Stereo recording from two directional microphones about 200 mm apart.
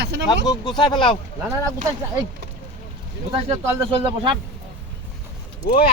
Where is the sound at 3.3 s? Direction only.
25° right (ahead or behind).